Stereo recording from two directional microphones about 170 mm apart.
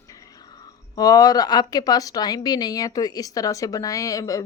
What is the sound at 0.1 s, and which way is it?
Speech, 20° left (ahead or behind).